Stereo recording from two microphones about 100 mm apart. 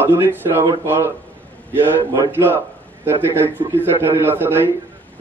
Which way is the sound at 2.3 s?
20° right (ahead or behind).